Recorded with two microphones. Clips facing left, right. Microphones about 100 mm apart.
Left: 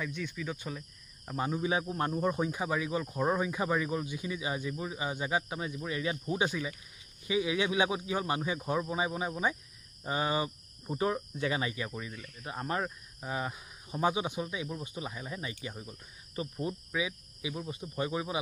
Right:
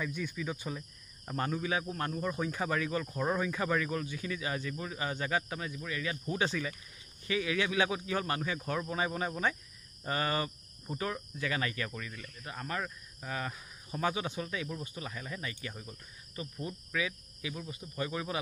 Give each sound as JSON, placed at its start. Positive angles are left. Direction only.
{"t": 0.0, "sound": "speech", "side_deg": -5}
{"t": 1.3, "sound": "speech", "side_deg": 10}
{"t": 1.6, "sound": "speech", "side_deg": 20}
{"t": 16.3, "sound": "cricket", "side_deg": 25}
{"t": 17.6, "sound": "speech", "side_deg": 25}